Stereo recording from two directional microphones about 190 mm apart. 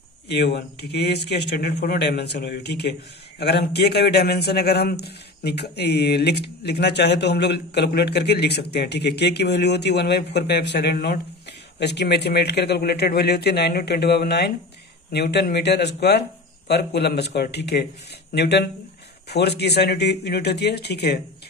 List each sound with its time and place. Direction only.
0.3 s speech: 60° left (ahead or behind)